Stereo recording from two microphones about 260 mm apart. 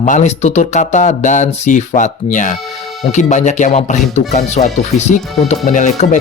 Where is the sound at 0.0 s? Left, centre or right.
Left.